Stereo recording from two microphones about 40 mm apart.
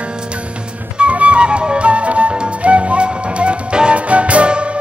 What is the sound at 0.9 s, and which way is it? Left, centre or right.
Flute, right.